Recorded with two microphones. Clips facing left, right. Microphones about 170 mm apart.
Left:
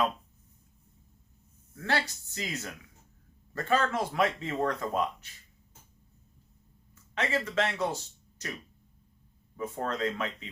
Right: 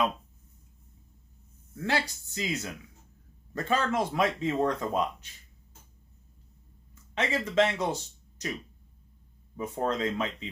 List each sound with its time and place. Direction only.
1.8 s speech: 15° right (ahead or behind)
7.2 s speech: 20° right (ahead or behind)
9.6 s speech: 20° right (ahead or behind)